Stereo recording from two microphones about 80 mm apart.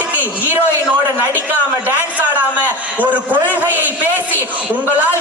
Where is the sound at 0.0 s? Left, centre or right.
Right.